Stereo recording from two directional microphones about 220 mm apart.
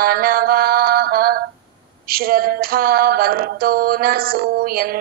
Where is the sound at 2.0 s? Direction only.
45° right (ahead or behind).